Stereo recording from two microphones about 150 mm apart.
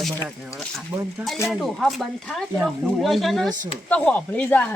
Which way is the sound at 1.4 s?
Centre (ahead or behind).